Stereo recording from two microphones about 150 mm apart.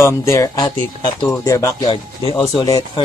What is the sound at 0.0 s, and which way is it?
Speech, 20° left (ahead or behind).